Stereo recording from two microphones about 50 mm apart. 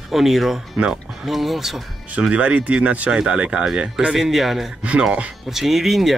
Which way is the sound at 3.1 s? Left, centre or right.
Centre.